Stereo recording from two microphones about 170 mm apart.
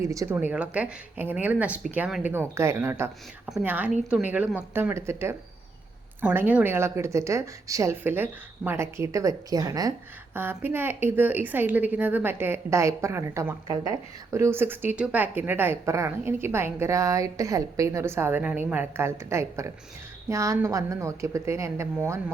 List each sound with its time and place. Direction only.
0.0 s a woman's voice: 20° right (ahead or behind)